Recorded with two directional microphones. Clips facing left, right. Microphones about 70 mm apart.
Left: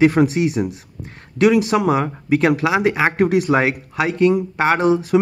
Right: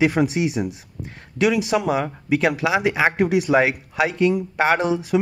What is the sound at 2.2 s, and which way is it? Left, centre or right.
Speech, left.